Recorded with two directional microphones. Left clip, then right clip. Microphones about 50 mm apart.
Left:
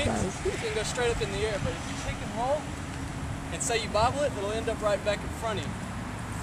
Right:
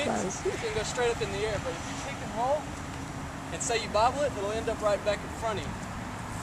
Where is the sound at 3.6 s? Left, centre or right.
Centre.